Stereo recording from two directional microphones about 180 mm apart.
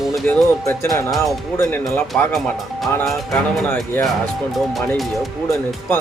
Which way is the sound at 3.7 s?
5° left (ahead or behind).